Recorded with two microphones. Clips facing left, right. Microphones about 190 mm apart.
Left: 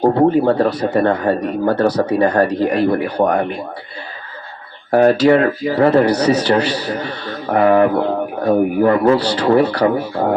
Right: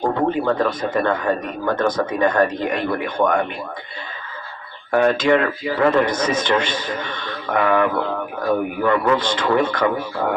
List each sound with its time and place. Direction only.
0.0 s speech: 35° left (ahead or behind)
4.9 s speech: 35° left (ahead or behind)